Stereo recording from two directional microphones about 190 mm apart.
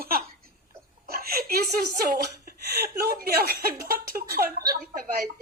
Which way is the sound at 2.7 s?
55° right (ahead or behind).